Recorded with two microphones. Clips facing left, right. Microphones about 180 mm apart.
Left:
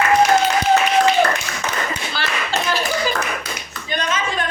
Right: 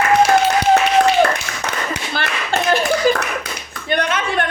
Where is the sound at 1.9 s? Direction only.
55° right (ahead or behind).